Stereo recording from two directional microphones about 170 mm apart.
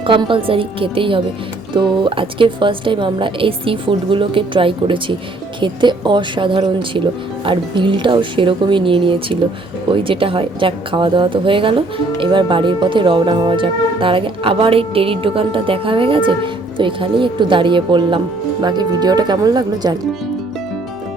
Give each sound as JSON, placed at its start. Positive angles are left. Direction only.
{"t": 0.0, "sound": "a woman's voice", "side_deg": -30}